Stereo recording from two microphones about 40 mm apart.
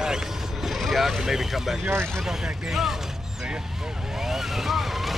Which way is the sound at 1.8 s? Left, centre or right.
Right.